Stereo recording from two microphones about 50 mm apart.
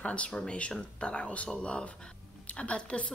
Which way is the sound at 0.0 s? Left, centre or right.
Left.